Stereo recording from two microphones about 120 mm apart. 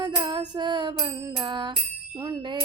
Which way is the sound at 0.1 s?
40° right (ahead or behind).